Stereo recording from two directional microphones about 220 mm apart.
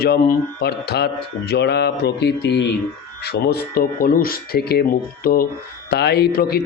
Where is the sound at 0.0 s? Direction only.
45° left (ahead or behind).